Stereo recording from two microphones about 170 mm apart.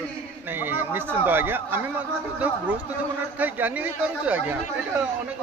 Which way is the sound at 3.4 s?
10° right (ahead or behind).